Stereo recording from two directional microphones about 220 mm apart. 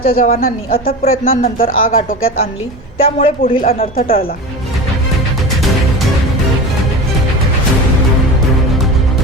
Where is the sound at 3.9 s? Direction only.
40° left (ahead or behind).